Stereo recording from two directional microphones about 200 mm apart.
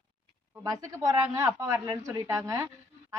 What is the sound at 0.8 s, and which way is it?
Speech, 15° right (ahead or behind).